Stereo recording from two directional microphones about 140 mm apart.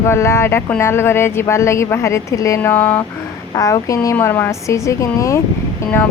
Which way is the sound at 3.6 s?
25° left (ahead or behind).